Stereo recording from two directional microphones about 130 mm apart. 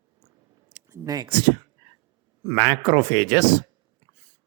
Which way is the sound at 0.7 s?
30° right (ahead or behind).